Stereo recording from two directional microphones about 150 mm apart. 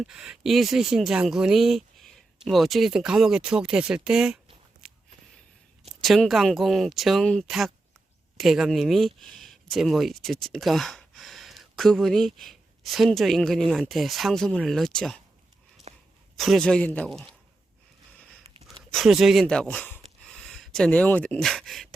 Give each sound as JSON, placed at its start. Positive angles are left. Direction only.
{"t": 0.0, "sound": "speech", "side_deg": -5}
{"t": 4.8, "sound": "walk", "side_deg": -5}
{"t": 5.8, "sound": "speech", "side_deg": 0}
{"t": 15.9, "sound": "a sound", "side_deg": -45}
{"t": 16.4, "sound": "speech", "side_deg": 5}
{"t": 18.4, "sound": "a sound", "side_deg": -40}
{"t": 18.9, "sound": "speech", "side_deg": 0}